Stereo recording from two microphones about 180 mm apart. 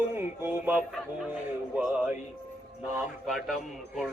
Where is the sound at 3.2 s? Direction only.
Centre (ahead or behind).